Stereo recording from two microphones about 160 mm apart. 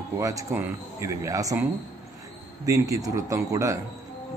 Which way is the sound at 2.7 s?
20° right (ahead or behind).